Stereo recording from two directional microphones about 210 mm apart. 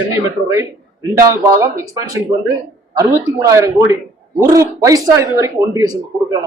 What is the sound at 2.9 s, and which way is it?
A man's voice, 15° right (ahead or behind).